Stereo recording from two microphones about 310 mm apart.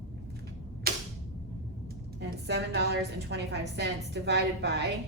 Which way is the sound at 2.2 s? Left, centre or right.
Right.